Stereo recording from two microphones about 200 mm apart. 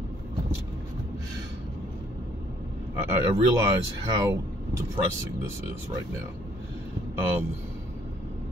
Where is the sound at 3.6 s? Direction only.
15° right (ahead or behind).